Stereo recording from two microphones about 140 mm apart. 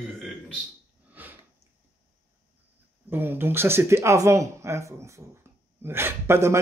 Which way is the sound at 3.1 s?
15° right (ahead or behind).